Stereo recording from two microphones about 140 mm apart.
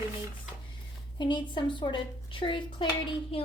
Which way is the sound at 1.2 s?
35° left (ahead or behind).